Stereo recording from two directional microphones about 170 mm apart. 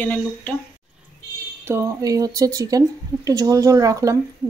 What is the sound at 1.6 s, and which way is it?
Speech, 15° right (ahead or behind).